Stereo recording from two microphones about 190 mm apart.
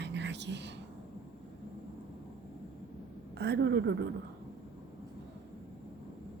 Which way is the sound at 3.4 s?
60° right (ahead or behind).